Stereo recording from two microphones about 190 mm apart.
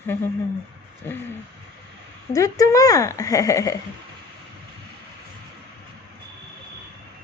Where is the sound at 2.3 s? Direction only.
20° left (ahead or behind).